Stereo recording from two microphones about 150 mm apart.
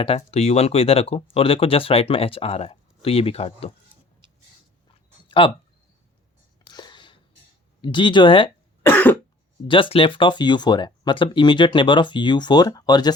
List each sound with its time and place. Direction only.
0.0 s speech: 40° left (ahead or behind)
5.4 s speech: 35° left (ahead or behind)
6.7 s a sound: 30° left (ahead or behind)
7.8 s speech: 30° left (ahead or behind)
8.9 s cough: 10° left (ahead or behind)
9.6 s speech: 35° left (ahead or behind)